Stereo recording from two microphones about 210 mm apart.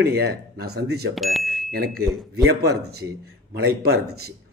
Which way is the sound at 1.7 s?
50° right (ahead or behind).